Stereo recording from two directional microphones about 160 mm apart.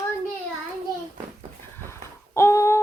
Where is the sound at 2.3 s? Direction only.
15° left (ahead or behind).